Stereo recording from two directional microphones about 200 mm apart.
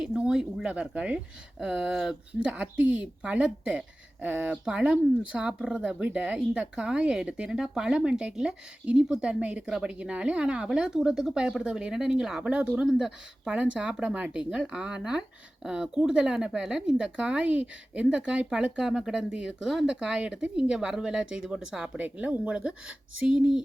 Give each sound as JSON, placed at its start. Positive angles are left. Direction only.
{"t": 0.0, "sound": "speech", "side_deg": -5}